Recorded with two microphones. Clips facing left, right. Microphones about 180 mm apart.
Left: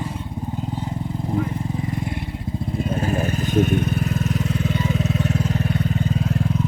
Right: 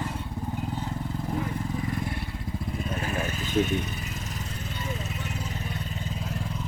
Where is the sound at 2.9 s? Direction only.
35° left (ahead or behind); by 6.2 s 70° left (ahead or behind).